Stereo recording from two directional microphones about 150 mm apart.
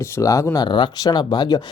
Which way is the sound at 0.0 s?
20° left (ahead or behind).